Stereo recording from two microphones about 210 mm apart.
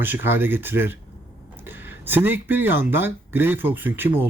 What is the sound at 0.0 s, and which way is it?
Speech, 10° right (ahead or behind).